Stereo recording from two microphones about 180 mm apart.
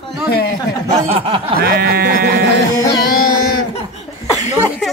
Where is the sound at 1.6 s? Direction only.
60° right (ahead or behind).